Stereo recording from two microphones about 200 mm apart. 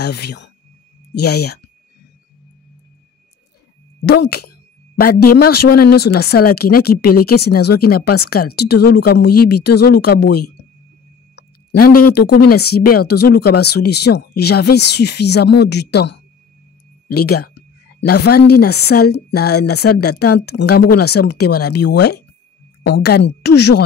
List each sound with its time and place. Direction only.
0.0 s speech: 55° left (ahead or behind)
4.0 s speech: 55° left (ahead or behind)